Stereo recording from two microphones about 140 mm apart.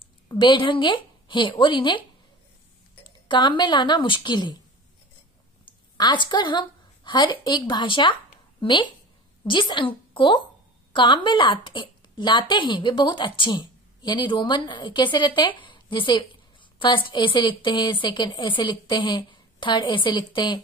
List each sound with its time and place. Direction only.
0.3 s a woman's voice: 35° left (ahead or behind)
5.9 s a woman's voice: 30° left (ahead or behind)